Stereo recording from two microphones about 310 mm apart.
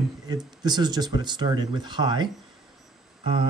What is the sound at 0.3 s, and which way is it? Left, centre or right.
Speech, centre.